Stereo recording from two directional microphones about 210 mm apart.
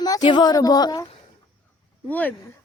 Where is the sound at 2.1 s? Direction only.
10° left (ahead or behind).